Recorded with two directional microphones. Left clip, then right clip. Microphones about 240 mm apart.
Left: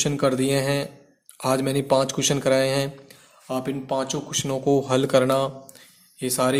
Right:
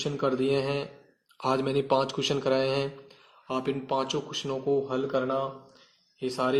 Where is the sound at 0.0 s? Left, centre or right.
Left.